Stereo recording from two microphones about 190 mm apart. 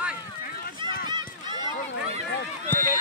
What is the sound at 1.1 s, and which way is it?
Run, 25° right (ahead or behind).